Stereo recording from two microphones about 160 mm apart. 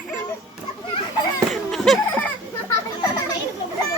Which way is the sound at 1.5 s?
Centre (ahead or behind).